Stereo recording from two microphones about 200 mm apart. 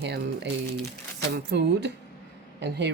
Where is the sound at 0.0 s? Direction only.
55° right (ahead or behind).